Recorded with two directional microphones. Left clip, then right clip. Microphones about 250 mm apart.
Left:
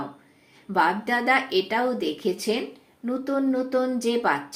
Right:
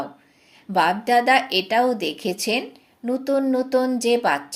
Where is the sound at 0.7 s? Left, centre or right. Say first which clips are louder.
Right 4 dB; right.